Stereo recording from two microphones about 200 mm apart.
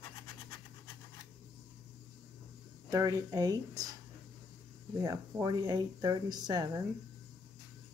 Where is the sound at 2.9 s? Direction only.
15° right (ahead or behind).